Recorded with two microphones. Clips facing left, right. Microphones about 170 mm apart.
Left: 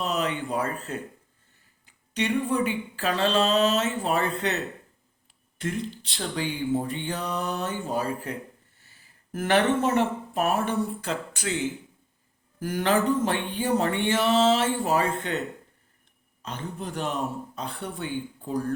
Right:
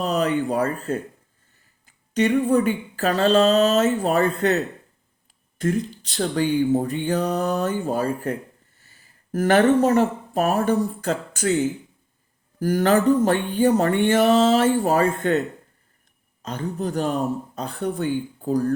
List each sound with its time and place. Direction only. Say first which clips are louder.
0.0 s speech: right 6 dB; 40° right (ahead or behind)
1.9 s speech: right 7 dB; 45° right (ahead or behind)
16.4 s speech: right 7 dB; 40° right (ahead or behind)